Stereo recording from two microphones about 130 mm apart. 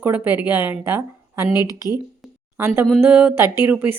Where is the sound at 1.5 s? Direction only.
30° left (ahead or behind).